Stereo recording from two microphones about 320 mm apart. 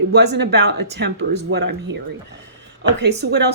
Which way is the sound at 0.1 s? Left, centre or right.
Right.